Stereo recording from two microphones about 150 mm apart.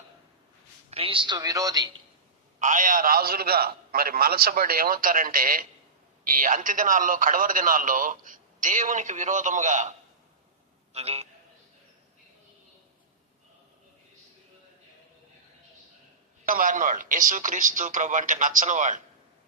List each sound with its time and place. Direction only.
0.9 s a man's voice: 40° right (ahead or behind); by 1.9 s 25° right (ahead or behind)
2.6 s a man's voice: 60° right (ahead or behind)
10.9 s speech: 45° right (ahead or behind)
16.5 s a man's voice: 65° right (ahead or behind)